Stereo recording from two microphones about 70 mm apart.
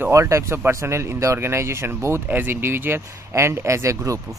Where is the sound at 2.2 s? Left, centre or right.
Right.